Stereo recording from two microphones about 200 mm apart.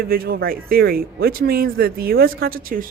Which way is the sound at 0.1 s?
50° right (ahead or behind).